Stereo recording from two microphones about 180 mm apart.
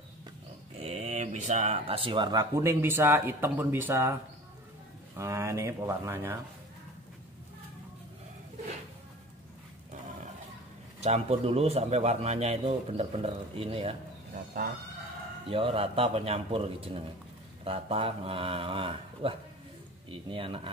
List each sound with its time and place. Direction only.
0.7 s speech: 35° right (ahead or behind); by 6.3 s 15° right (ahead or behind)
11.0 s a man's voice: 35° right (ahead or behind)
15.4 s a man's voice: 30° right (ahead or behind)